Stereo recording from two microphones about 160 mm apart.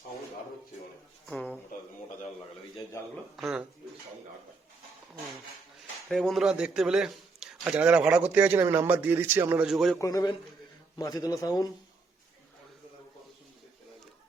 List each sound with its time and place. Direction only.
1.3 s a sound: 5° left (ahead or behind)
3.3 s speech: 5° right (ahead or behind)
6.1 s speech: centre (ahead or behind)
9.6 s speech: centre (ahead or behind)
10.0 s a man's voice: 20° left (ahead or behind)